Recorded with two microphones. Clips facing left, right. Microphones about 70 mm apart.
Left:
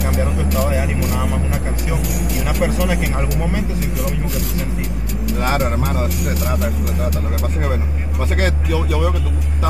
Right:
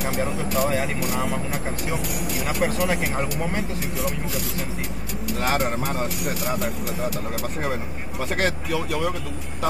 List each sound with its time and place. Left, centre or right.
0.4 s speech: centre
5.4 s speech: centre